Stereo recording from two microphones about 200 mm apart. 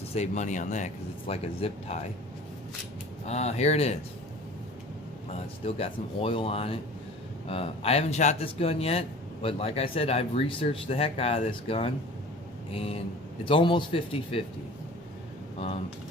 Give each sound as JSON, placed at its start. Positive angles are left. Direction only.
{"t": 0.1, "sound": "speech", "side_deg": 35}
{"t": 3.2, "sound": "speech", "side_deg": 35}
{"t": 5.3, "sound": "speech", "side_deg": 30}